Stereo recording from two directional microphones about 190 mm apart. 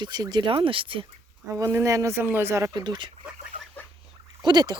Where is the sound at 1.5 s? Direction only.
15° right (ahead or behind).